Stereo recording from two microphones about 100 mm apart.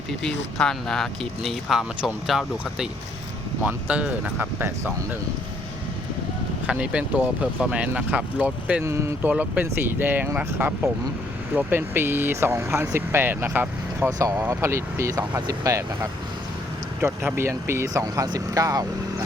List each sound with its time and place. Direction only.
0.2 s speech: 5° left (ahead or behind)
3.7 s speech: 15° right (ahead or behind)
6.7 s speech: 10° right (ahead or behind)
8.8 s speech: 30° right (ahead or behind)
9.2 s speech: 15° right (ahead or behind)
14.1 s speech: 40° right (ahead or behind)
14.3 s speech: 25° right (ahead or behind)
17.3 s speech: 25° right (ahead or behind)